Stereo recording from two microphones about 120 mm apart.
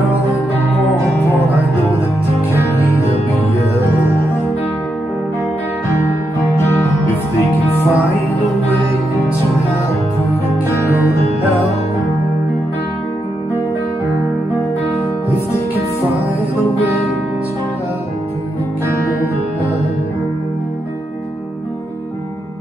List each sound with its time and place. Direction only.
7.9 s music: 25° left (ahead or behind)